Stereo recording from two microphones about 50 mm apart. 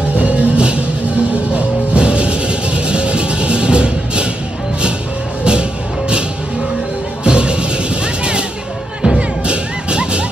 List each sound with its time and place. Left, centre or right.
0.2 s music: right
5.4 s music: centre
7.2 s music: centre